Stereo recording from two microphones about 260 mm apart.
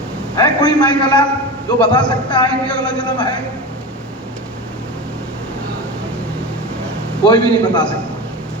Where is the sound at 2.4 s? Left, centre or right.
Centre.